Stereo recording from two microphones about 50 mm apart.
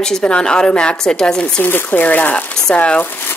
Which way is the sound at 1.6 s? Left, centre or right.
Left.